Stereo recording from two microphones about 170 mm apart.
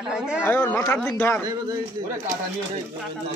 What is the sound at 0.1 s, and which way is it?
Speech, 5° right (ahead or behind).